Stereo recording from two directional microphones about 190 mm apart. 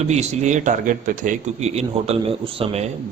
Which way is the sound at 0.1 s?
35° right (ahead or behind).